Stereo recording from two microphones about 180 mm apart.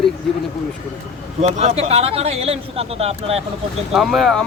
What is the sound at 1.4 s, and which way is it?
Speech, 40° right (ahead or behind).